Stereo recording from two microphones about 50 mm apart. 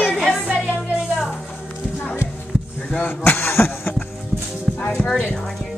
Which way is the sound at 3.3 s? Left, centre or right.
Left.